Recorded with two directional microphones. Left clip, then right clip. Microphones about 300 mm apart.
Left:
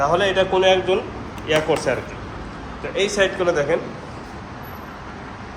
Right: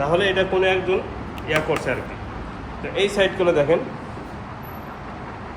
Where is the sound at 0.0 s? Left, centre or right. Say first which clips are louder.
Left 2 dB; centre.